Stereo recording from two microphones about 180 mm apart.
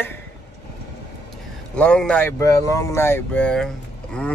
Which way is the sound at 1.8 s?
5° left (ahead or behind).